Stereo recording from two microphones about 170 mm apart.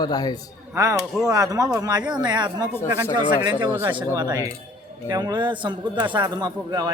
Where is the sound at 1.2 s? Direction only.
20° right (ahead or behind).